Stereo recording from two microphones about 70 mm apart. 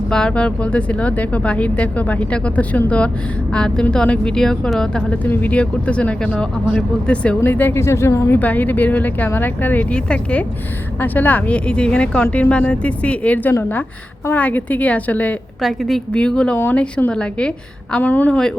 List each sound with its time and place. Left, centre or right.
0.1 s speech: centre
5.2 s speech: left
7.4 s speech: left
7.8 s speech: left
8.4 s speech: left
11.0 s speech: left
15.6 s a woman's voice: centre
16.1 s speech: centre